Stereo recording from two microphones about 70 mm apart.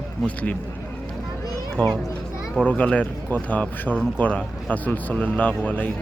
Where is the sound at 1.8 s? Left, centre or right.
Centre.